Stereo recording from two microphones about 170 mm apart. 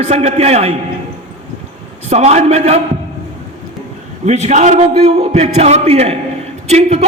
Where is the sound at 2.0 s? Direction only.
40° right (ahead or behind).